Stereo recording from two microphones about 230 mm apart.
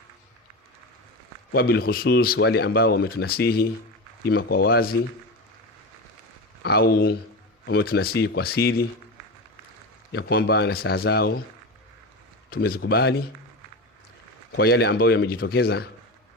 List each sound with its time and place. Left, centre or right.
1.5 s speech: left
6.6 s speech: left
10.1 s speech: left
12.5 s speech: left
14.5 s speech: left